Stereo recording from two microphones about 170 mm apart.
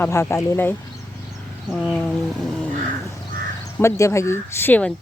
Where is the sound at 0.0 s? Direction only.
15° left (ahead or behind).